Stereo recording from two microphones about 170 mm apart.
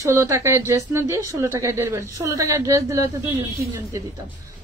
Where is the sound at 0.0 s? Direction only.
15° right (ahead or behind).